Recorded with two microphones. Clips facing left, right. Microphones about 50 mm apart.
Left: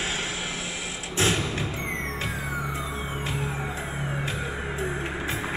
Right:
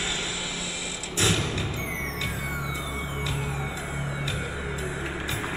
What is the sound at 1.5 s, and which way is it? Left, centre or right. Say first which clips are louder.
Music: left 1 dB; left.